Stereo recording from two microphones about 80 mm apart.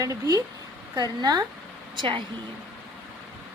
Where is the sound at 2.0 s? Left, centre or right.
Right.